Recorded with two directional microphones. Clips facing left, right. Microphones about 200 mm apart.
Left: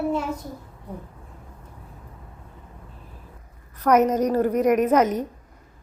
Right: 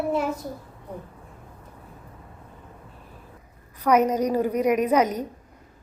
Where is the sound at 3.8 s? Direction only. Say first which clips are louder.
Left 2 dB; 10° right (ahead or behind).